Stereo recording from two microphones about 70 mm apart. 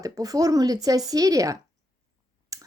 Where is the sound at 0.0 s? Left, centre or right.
Right.